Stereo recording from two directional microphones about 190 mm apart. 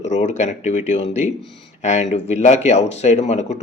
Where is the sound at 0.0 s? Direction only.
35° left (ahead or behind).